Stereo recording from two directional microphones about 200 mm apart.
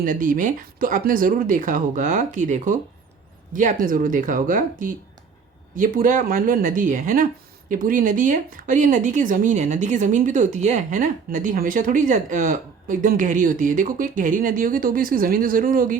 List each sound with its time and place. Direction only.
0.0 s speech: 40° right (ahead or behind)